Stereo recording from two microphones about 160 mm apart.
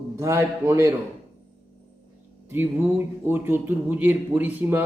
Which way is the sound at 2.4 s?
15° right (ahead or behind).